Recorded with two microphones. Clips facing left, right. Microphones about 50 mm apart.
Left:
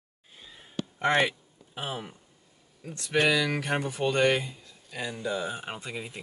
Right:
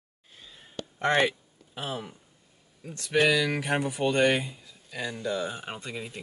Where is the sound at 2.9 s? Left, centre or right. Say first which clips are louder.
Right 1 dB; centre.